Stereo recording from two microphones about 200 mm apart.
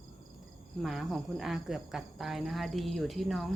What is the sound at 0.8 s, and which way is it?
Speech, centre (ahead or behind).